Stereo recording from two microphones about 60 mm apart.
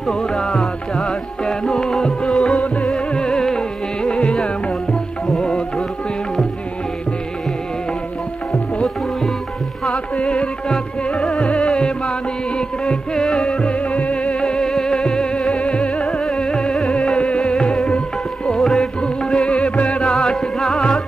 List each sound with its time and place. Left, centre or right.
0.1 s music: centre
10.1 s music: centre